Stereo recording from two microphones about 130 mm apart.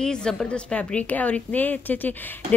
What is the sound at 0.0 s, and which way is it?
A woman's voice, 5° left (ahead or behind).